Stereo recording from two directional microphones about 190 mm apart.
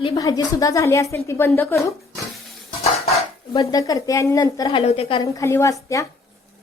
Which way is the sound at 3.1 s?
30° left (ahead or behind).